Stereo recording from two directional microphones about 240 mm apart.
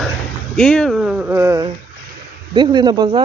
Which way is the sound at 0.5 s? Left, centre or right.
Centre.